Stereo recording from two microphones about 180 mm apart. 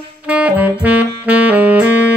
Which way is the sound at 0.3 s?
5° right (ahead or behind).